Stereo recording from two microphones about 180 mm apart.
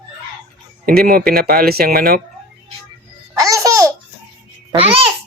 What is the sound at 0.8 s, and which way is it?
Speech, 55° right (ahead or behind).